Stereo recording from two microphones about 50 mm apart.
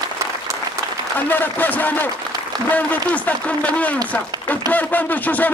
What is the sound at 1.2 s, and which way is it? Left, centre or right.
Speech, left.